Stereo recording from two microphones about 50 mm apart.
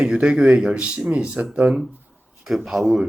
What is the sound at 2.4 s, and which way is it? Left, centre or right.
Speech, centre.